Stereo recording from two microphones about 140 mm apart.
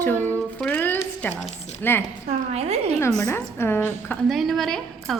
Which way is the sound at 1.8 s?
10° left (ahead or behind).